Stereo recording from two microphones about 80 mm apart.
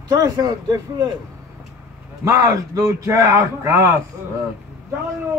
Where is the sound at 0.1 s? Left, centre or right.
Right.